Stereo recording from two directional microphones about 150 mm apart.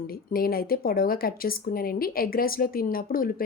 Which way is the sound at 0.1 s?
80° left.